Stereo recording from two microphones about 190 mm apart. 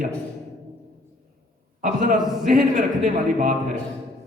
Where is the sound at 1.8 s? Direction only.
45° right (ahead or behind).